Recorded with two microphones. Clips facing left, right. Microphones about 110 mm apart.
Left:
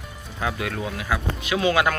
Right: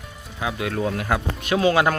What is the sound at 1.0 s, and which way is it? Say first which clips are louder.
Speech: right 2 dB; 50° right (ahead or behind).